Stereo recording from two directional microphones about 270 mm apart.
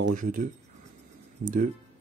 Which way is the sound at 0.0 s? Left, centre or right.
Right.